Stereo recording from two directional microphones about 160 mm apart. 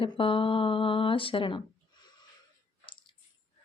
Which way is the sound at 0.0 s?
35° left (ahead or behind).